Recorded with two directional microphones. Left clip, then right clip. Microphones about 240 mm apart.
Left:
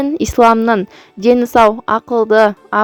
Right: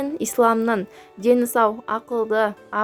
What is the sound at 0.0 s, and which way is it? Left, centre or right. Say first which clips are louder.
A woman's voice: left 8 dB; left.